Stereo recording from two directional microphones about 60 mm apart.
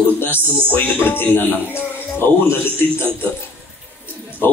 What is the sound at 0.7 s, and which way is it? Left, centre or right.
A man's voice, left.